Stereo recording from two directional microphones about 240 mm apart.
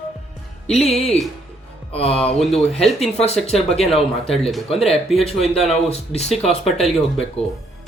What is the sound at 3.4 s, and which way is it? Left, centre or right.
Speech, left.